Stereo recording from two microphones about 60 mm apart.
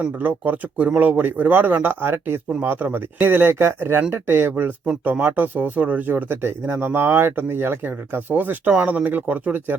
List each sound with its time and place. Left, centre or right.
0.2 s speech: right